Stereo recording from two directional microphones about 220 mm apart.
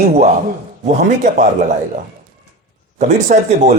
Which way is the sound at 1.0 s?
35° right (ahead or behind).